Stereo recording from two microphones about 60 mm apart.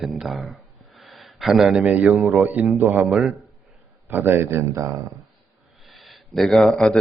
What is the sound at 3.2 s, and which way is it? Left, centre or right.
Speech, centre.